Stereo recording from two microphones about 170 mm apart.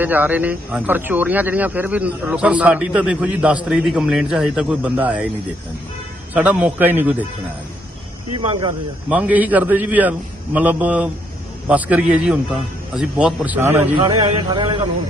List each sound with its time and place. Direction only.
0.0 s speech: 10° right (ahead or behind)
6.3 s speech: 10° right (ahead or behind)
8.4 s speech: 30° right (ahead or behind)
9.0 s speech: 10° right (ahead or behind)
14.0 s speech: 25° right (ahead or behind)